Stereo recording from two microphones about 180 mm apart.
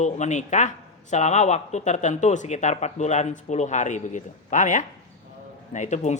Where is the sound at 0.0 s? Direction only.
40° left (ahead or behind).